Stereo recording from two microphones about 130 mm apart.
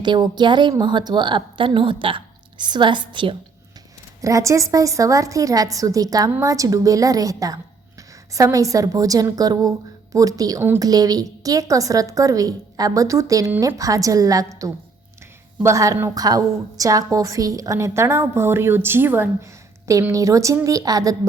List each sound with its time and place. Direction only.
0.0 s a woman's voice: 35° right (ahead or behind)
4.2 s a woman's voice: 25° right (ahead or behind)